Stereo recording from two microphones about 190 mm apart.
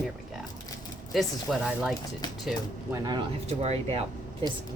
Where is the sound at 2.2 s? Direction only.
20° left (ahead or behind).